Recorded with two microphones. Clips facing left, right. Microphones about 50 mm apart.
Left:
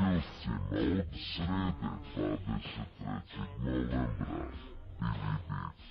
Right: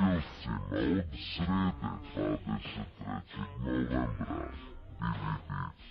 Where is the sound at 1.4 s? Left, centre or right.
Centre.